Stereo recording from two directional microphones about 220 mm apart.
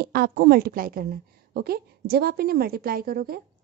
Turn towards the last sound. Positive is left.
turn(degrees=-45)  # may be behind; listen again after turning